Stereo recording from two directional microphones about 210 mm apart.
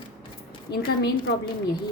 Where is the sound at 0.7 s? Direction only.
20° left (ahead or behind).